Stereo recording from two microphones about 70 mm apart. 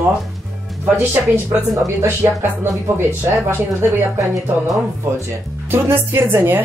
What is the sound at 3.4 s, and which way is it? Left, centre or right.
Speech, right.